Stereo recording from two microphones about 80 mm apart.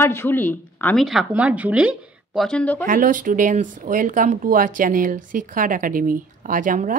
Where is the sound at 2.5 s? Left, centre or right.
Centre.